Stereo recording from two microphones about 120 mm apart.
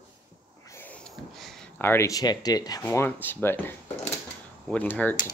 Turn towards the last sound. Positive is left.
turn(degrees=15)  # may be behind; listen again after turning